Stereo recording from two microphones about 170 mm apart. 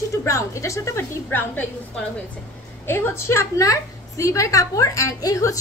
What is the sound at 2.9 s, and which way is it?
A woman's voice, 15° left (ahead or behind).